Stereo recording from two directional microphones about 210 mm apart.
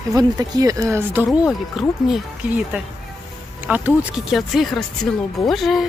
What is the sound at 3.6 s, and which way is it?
Speech, 5° right (ahead or behind).